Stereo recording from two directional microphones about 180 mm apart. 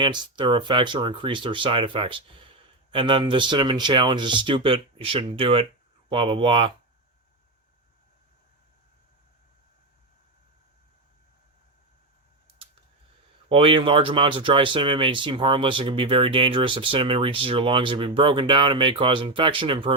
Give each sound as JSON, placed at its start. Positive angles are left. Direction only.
{"t": 0.0, "sound": "speech", "side_deg": -25}
{"t": 13.5, "sound": "speech", "side_deg": -30}